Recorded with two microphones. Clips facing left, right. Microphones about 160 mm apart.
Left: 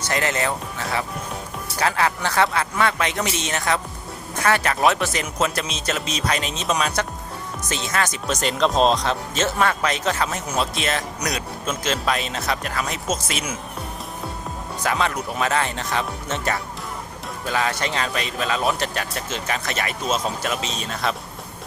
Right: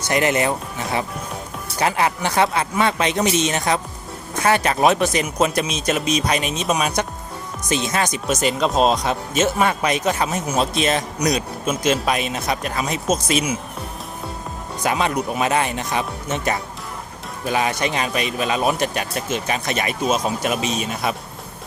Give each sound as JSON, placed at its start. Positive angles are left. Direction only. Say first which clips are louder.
{"t": 0.1, "sound": "a man's voice", "louder": "right 5 dB", "side_deg": -15}
{"t": 14.8, "sound": "a man's voice", "louder": "right 3 dB", "side_deg": -15}